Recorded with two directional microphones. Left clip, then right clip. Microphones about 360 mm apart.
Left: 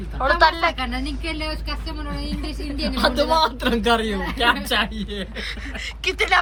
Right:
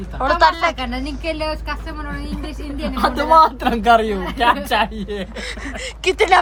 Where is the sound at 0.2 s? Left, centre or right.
Centre.